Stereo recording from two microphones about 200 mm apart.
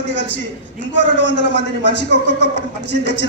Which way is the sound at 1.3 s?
65° left (ahead or behind).